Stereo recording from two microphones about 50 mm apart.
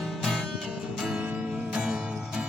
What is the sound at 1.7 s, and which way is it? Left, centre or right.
Music, centre.